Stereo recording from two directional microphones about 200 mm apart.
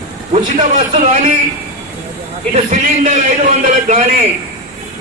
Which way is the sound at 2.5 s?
40° right (ahead or behind).